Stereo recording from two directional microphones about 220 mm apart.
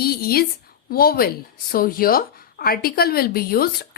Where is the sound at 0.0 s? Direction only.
45° left (ahead or behind).